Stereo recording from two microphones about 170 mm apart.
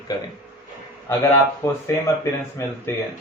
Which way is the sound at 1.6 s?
20° left (ahead or behind).